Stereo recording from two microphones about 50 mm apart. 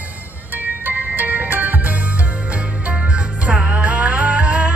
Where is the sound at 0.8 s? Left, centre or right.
Right.